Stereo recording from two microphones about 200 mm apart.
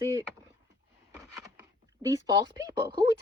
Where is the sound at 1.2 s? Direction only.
15° right (ahead or behind).